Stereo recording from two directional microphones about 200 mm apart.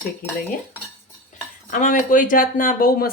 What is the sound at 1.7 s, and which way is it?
Speech, 40° left (ahead or behind).